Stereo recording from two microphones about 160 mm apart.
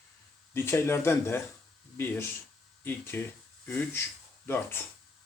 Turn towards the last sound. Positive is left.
turn(degrees=15)  # may be behind; listen again after turning